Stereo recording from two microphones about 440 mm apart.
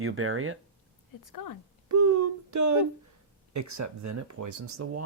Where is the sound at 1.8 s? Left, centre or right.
Right.